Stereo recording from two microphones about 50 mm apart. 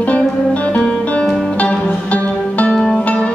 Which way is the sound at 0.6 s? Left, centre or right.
Left.